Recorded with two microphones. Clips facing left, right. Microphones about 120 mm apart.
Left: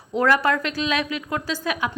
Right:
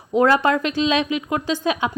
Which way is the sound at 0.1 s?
20° right (ahead or behind).